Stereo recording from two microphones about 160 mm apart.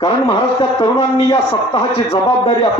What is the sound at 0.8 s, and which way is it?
A man's voice, 35° left (ahead or behind).